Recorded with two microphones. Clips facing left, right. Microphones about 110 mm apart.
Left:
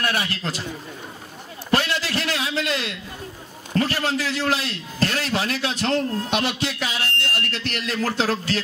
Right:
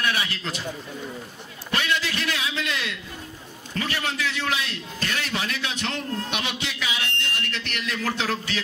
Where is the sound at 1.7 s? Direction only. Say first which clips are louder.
Left 4 dB; 35° left (ahead or behind).